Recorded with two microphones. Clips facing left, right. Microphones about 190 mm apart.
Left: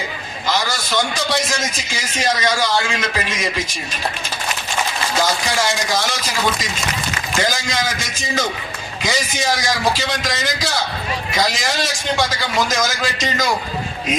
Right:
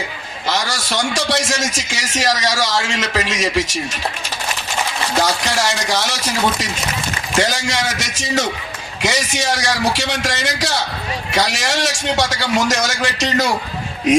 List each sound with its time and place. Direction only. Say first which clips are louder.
0.4 s a man's voice: even; 75° right (ahead or behind)
5.2 s a man's voice: left 1 dB; 70° right (ahead or behind)